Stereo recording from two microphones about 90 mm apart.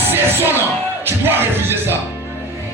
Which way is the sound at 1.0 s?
25° right (ahead or behind).